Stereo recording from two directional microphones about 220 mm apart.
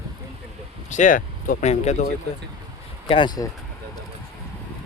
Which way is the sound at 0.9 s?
35° left (ahead or behind).